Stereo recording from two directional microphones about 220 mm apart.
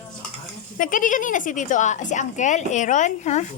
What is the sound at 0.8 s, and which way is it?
A woman's voice, 35° left (ahead or behind).